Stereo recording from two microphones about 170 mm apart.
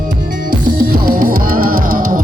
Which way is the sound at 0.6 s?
60° right (ahead or behind).